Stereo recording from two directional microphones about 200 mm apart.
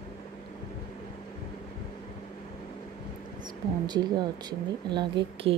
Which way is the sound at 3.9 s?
20° right (ahead or behind).